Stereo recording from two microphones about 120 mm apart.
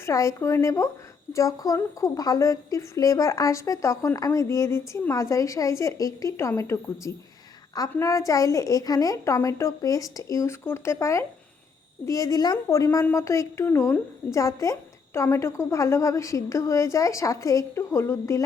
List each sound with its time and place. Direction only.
0.0 s a woman's voice: 25° left (ahead or behind)